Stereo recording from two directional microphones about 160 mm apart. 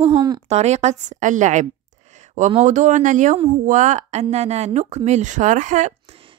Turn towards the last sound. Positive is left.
turn(degrees=-35)  # may be behind; listen again after turning